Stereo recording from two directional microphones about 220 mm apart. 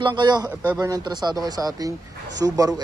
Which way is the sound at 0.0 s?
20° right (ahead or behind).